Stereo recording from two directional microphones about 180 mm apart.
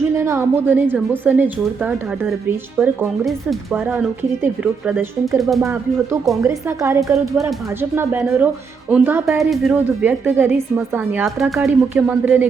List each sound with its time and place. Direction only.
0.1 s a woman's voice: 15° right (ahead or behind)
3.2 s a woman's voice: centre (ahead or behind)
6.4 s a woman's voice: 15° right (ahead or behind)
9.4 s a woman's voice: centre (ahead or behind)
11.3 s speech: centre (ahead or behind)